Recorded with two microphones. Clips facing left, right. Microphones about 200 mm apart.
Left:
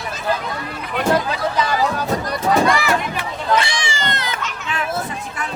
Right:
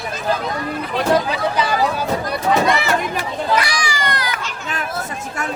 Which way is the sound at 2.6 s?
25° right (ahead or behind).